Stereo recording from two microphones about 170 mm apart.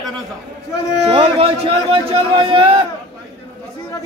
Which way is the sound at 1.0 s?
35° right (ahead or behind).